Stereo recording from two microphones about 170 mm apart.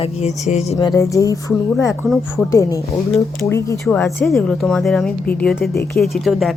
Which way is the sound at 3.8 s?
Centre (ahead or behind).